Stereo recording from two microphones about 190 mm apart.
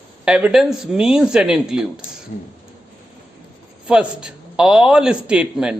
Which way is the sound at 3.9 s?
5° right (ahead or behind).